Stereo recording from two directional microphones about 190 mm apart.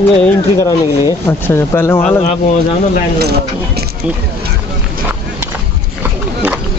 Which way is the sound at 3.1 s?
60° right (ahead or behind).